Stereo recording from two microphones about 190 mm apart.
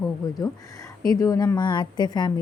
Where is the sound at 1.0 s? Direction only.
20° left (ahead or behind).